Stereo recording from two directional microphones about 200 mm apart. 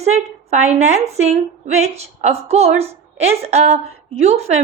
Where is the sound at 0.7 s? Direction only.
35° right (ahead or behind).